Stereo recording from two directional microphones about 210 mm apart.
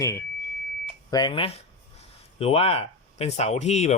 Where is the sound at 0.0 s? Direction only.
15° left (ahead or behind).